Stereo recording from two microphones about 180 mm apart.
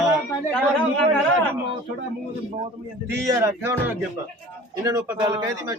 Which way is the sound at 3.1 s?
15° right (ahead or behind).